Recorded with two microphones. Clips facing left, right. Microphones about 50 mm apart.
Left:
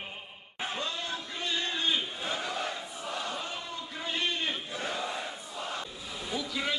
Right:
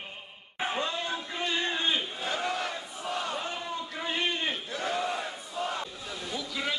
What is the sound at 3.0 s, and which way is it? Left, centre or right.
Battle cry, right.